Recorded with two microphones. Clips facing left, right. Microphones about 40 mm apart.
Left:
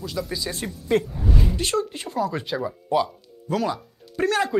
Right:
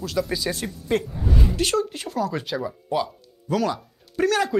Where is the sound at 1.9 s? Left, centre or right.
Left.